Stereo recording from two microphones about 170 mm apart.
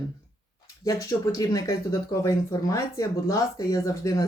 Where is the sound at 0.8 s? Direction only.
20° left (ahead or behind).